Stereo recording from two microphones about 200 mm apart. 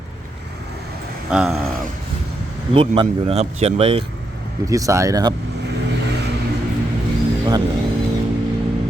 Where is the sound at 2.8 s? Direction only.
30° right (ahead or behind).